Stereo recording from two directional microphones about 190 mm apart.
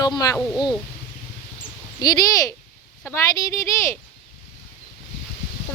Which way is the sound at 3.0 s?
15° left (ahead or behind).